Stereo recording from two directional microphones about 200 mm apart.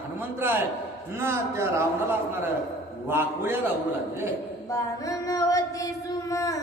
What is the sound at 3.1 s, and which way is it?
Speech, 10° right (ahead or behind).